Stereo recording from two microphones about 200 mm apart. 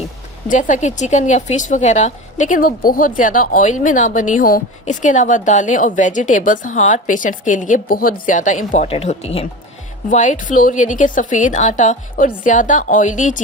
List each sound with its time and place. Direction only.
0.4 s speech: 40° left (ahead or behind)